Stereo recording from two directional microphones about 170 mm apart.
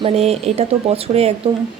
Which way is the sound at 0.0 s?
35° right (ahead or behind).